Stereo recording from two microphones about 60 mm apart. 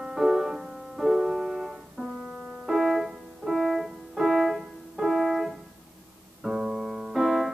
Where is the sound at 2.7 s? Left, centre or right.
Centre.